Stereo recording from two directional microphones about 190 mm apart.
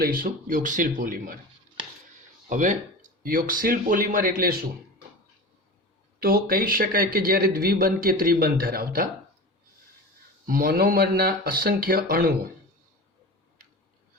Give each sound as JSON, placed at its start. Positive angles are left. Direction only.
{"t": 0.0, "sound": "speech", "side_deg": -50}
{"t": 2.5, "sound": "speech", "side_deg": -40}
{"t": 6.1, "sound": "speech", "side_deg": -50}
{"t": 10.4, "sound": "speech", "side_deg": -50}